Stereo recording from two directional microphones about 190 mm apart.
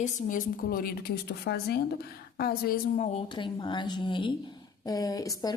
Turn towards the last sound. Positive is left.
turn(degrees=20)  # may be behind; listen again after turning